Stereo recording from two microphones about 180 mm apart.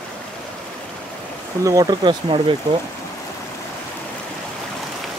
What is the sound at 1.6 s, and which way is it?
Speech, 20° right (ahead or behind).